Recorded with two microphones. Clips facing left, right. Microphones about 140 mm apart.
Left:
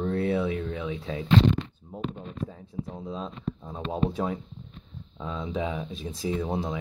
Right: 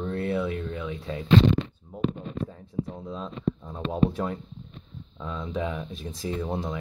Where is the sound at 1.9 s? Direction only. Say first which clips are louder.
Left 3 dB; 5° left (ahead or behind).